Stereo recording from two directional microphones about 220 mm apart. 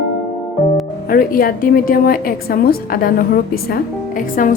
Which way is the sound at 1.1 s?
40° left (ahead or behind).